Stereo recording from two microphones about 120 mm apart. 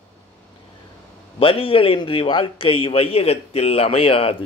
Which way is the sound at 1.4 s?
45° left (ahead or behind).